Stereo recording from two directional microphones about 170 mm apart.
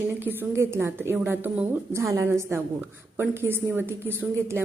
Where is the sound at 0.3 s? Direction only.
15° right (ahead or behind).